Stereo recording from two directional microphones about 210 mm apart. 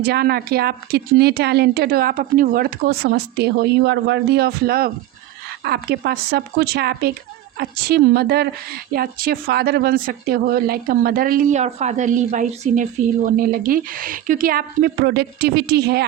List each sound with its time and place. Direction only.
0.0 s a woman's voice: 50° right (ahead or behind)